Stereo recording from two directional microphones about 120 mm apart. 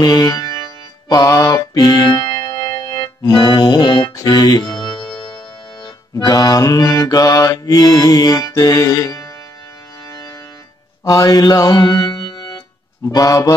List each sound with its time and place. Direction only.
0.0 s music: 35° left (ahead or behind)
11.1 s music: 30° left (ahead or behind)
13.1 s music: 30° left (ahead or behind)